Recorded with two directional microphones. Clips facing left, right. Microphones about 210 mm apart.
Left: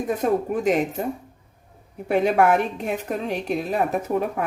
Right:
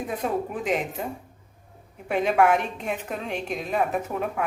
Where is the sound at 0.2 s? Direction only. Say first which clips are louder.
Left 6 dB; 45° left (ahead or behind).